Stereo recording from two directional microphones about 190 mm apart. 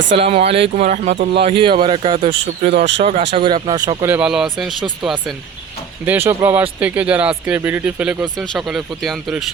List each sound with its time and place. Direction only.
0.2 s speech: 30° right (ahead or behind)
1.4 s speech: 30° right (ahead or behind)
4.1 s speech: 5° right (ahead or behind)
6.1 s speech: 10° right (ahead or behind)